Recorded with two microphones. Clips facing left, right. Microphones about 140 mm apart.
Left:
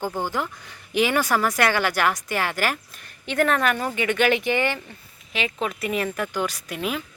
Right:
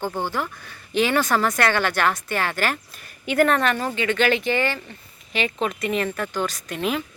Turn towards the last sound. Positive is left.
turn(degrees=5)  # may be behind; listen again after turning